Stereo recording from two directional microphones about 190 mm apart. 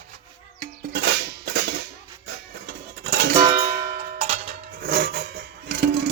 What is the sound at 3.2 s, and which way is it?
Music, 55° right (ahead or behind).